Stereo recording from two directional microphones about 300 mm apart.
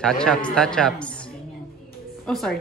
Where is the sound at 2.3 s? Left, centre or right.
Centre.